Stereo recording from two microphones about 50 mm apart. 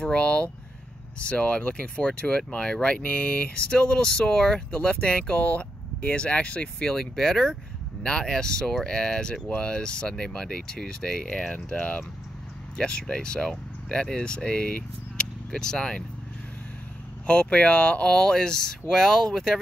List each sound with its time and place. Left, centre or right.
0.0 s speech: left
5.4 s speech: left
7.0 s speech: centre
12.7 s speech: centre
17.3 s speech: left; by 19.6 s centre